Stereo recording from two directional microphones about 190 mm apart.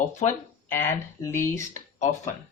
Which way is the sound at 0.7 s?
10° left (ahead or behind).